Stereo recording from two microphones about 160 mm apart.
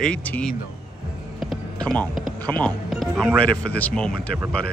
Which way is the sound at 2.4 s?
10° left (ahead or behind).